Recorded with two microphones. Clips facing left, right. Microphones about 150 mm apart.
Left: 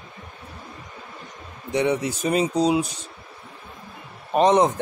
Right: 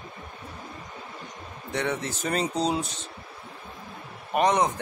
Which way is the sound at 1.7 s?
15° left (ahead or behind).